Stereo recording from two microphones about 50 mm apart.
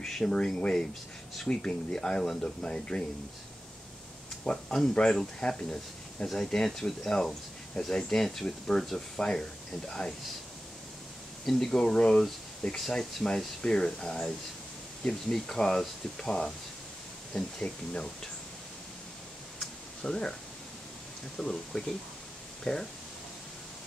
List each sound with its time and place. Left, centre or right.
0.0 s speech: centre
4.5 s speech: centre
11.4 s speech: centre
19.6 s a sound: centre
21.4 s speech: centre